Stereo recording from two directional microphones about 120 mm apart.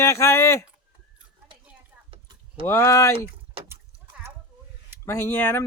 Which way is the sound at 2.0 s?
50° right (ahead or behind).